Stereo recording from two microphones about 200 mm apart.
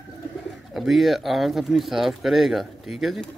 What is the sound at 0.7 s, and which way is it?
A man's voice, centre (ahead or behind).